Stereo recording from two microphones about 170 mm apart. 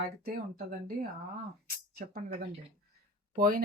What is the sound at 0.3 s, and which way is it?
Speech, 60° right (ahead or behind).